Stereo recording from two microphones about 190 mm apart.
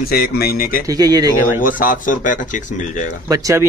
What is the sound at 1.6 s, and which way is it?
Speech, 45° left (ahead or behind).